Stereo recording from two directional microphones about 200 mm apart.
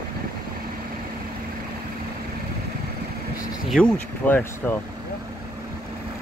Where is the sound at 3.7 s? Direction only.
5° left (ahead or behind).